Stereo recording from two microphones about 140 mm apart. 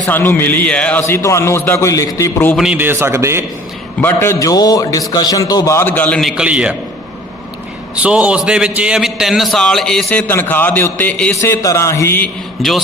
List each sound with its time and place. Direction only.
0.1 s a man's voice: 15° left (ahead or behind)
2.7 s a man's voice: 15° right (ahead or behind)
4.0 s a man's voice: 20° left (ahead or behind)
6.3 s a man's voice: 10° right (ahead or behind)
7.9 s a man's voice: 10° right (ahead or behind); by 11.3 s 10° left (ahead or behind)
11.3 s a man's voice: 20° left (ahead or behind)
12.6 s a man's voice: centre (ahead or behind)